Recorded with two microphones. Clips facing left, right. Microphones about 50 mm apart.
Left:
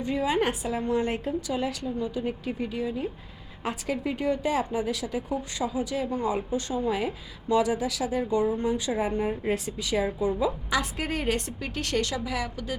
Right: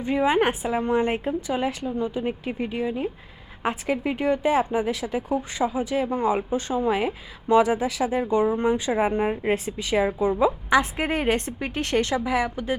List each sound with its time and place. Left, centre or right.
0.0 s a woman's voice: right